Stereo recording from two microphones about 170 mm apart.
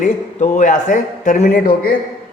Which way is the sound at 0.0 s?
45° left (ahead or behind).